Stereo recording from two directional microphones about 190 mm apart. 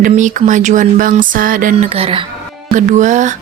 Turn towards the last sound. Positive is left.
turn(degrees=-40)  # may be behind; listen again after turning